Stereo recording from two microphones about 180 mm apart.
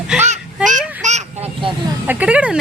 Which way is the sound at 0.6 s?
45° right (ahead or behind).